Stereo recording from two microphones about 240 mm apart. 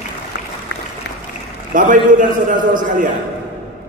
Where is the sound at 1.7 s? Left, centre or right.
Right.